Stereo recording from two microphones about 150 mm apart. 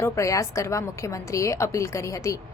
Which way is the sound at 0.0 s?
20° left (ahead or behind).